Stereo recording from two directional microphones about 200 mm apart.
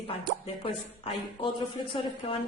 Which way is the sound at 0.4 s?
25° left (ahead or behind).